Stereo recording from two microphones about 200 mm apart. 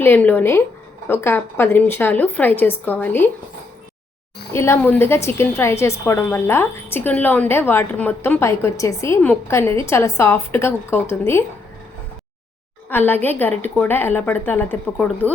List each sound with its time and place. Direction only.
0.0 s speech: 10° left (ahead or behind)
4.5 s speech: 15° left (ahead or behind)
12.9 s a woman's voice: 10° left (ahead or behind)